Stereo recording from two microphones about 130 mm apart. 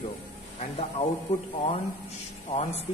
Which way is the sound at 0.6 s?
50° left (ahead or behind).